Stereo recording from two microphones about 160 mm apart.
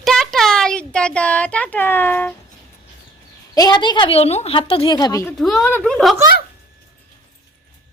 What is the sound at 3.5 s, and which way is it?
A woman's voice, 25° left (ahead or behind).